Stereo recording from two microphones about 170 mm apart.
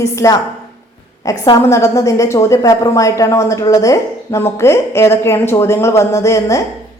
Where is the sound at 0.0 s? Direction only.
20° left (ahead or behind).